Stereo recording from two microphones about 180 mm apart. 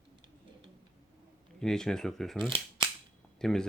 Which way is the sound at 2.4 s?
25° right (ahead or behind).